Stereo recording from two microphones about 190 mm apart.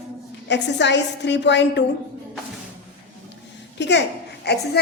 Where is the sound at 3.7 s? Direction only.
65° left (ahead or behind).